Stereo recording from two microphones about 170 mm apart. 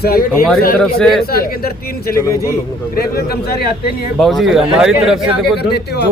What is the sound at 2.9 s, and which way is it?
Speech, 65° left (ahead or behind).